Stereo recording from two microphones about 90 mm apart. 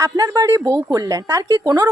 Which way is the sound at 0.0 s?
40° right (ahead or behind).